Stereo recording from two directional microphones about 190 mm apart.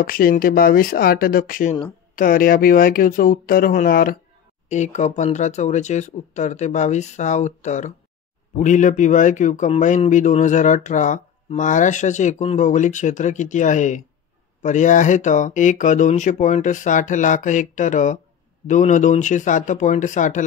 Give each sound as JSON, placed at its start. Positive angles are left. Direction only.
{"t": 0.0, "sound": "speech", "side_deg": 50}
{"t": 4.6, "sound": "speech", "side_deg": 40}